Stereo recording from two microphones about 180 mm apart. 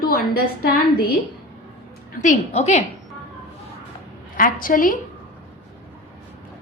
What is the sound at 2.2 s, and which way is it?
Speech, 40° left (ahead or behind).